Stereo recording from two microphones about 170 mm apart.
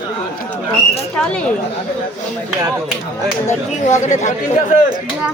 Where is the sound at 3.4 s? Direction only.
45° left (ahead or behind).